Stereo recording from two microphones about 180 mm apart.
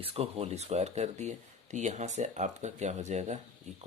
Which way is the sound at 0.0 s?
30° right (ahead or behind).